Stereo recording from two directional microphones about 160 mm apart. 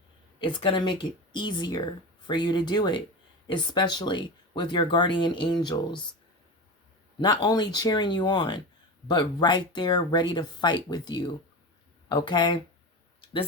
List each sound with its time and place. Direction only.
0.3 s speech: 30° left (ahead or behind)
7.4 s speech: 25° left (ahead or behind)